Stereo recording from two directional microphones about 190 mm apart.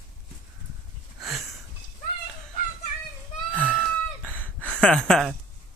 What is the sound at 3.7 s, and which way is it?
Chicken, 10° left (ahead or behind).